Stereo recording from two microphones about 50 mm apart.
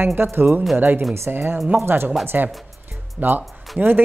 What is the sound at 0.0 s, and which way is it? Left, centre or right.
A woman's voice, right.